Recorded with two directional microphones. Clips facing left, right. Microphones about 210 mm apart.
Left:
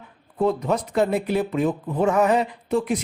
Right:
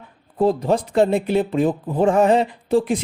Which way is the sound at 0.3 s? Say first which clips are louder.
Right 4 dB; 30° right (ahead or behind).